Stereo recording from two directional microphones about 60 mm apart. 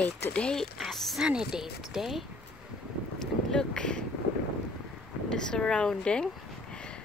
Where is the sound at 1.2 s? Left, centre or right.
Centre.